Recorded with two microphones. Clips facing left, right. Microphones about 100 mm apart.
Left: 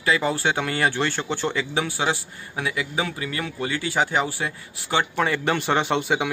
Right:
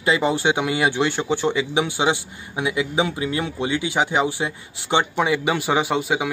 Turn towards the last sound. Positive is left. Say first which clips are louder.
# right 1 dB
turn(degrees=-5)  # may be behind; listen again after turning